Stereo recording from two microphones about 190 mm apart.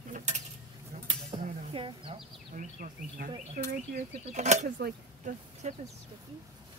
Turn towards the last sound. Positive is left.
turn(degrees=-45)  # may be behind; listen again after turning